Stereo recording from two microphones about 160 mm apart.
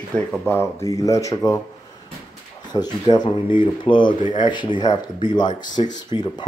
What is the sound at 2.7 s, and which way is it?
Speech, 25° left (ahead or behind).